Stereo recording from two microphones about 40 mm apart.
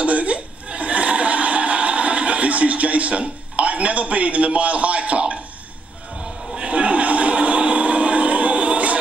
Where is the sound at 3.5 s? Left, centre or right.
Right.